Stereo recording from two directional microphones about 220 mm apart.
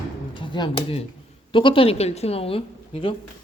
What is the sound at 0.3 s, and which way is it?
A woman's voice, 20° left (ahead or behind).